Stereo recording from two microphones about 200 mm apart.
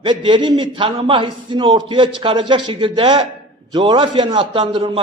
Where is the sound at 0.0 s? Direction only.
25° right (ahead or behind).